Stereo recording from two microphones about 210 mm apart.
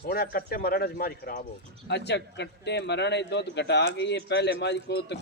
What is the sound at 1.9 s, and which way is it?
A man's voice, 55° left (ahead or behind).